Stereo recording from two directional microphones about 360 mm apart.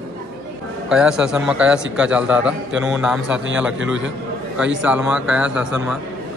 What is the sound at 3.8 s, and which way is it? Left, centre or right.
Speech, right.